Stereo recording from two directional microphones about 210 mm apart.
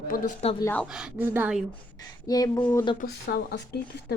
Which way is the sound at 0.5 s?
10° left (ahead or behind).